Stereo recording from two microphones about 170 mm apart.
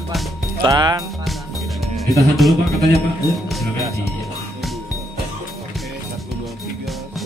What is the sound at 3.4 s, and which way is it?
Music, centre (ahead or behind).